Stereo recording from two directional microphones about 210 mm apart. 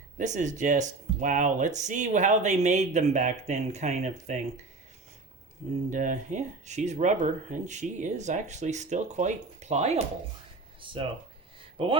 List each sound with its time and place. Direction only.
0.2 s speech: 35° right (ahead or behind)
5.9 s speech: 35° right (ahead or behind)
10.8 s a sound: 25° right (ahead or behind)